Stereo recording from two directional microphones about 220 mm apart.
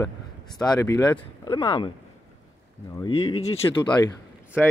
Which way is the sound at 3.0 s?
20° left (ahead or behind).